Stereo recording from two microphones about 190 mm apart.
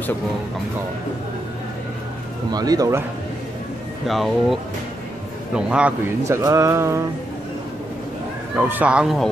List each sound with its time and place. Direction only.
2.5 s speech: 20° right (ahead or behind)
4.1 s a man's voice: centre (ahead or behind); by 7.0 s 15° right (ahead or behind)
8.5 s speech: 10° right (ahead or behind)